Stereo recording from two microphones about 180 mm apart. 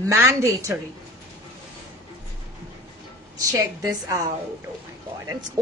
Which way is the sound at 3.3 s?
20° right (ahead or behind).